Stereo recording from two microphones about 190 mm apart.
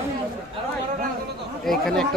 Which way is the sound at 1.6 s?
Centre (ahead or behind).